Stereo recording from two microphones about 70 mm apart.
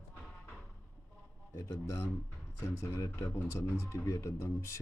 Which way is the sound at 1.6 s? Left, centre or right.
Left.